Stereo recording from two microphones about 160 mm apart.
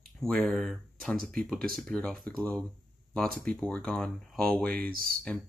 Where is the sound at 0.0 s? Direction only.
5° left (ahead or behind).